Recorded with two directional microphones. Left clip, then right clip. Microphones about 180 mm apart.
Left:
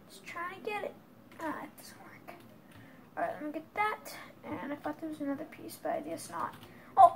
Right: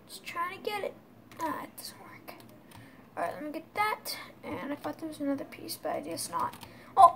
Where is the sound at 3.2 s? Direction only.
20° right (ahead or behind).